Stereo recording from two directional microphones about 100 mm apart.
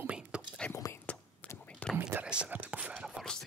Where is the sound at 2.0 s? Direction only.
10° right (ahead or behind).